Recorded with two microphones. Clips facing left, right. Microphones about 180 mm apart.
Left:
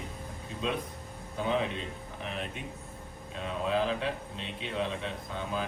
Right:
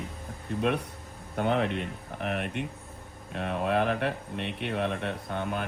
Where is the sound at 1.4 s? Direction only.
60° right (ahead or behind).